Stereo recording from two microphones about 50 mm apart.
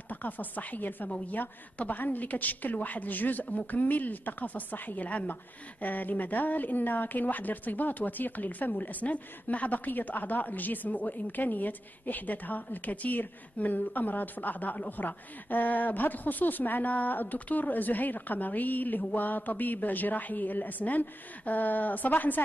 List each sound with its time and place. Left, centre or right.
0.1 s a woman's voice: left